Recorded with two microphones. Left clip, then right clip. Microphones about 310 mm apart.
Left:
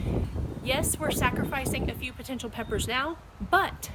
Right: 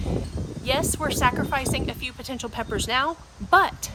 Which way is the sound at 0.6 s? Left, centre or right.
Centre.